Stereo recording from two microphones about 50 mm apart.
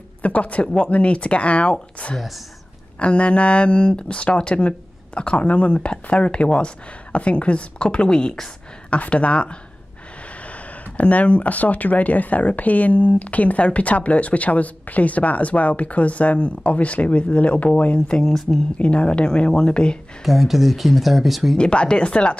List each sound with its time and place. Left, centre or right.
0.2 s speech: left
2.1 s speech: centre
3.0 s speech: left
18.2 s speech: centre
18.8 s speech: left
20.2 s speech: centre
21.5 s speech: left